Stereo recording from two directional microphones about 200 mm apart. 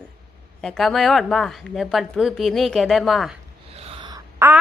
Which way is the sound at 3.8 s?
25° right (ahead or behind).